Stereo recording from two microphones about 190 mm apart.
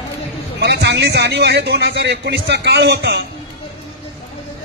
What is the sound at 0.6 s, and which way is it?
Speech, 60° right (ahead or behind).